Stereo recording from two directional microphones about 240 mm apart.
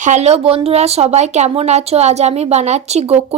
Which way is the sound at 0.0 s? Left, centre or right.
Right.